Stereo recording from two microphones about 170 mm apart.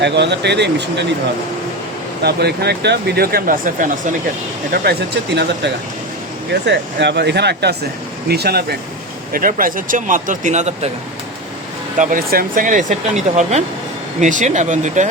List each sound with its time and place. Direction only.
0.0 s speech: 90° right
2.2 s speech: 70° right (ahead or behind); by 4.1 s 50° right (ahead or behind)
4.7 s speech: 70° right (ahead or behind)
9.3 s speech: 55° right (ahead or behind)
11.9 s speech: 55° right (ahead or behind)